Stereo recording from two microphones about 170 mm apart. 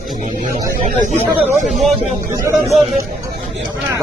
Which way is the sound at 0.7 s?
50° right (ahead or behind).